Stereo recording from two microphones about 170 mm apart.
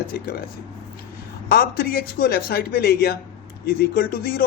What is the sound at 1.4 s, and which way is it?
Speech, 65° left (ahead or behind).